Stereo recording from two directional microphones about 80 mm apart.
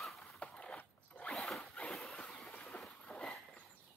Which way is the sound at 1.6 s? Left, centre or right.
Centre.